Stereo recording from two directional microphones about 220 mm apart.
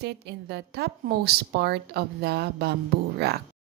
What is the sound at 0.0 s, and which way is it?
A woman's voice, 50° right (ahead or behind).